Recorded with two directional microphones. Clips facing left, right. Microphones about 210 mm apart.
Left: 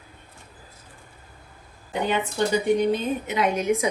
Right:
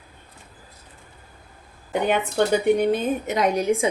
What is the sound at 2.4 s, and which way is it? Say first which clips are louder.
Speech: right 4 dB; 60° right (ahead or behind).